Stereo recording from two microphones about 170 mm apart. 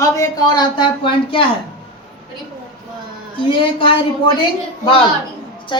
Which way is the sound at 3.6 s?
30° left (ahead or behind).